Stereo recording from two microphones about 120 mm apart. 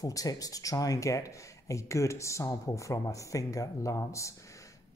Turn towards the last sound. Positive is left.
turn(degrees=25)  # may be behind; listen again after turning